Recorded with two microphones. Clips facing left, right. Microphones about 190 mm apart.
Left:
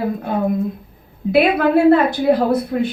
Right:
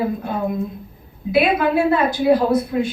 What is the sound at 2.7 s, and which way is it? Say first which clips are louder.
Speech: left 1 dB; 50° left (ahead or behind).